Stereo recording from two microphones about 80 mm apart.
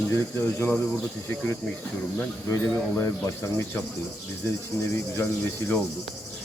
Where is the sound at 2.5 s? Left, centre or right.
Left.